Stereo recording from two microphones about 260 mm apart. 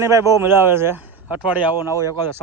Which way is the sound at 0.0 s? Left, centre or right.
Centre.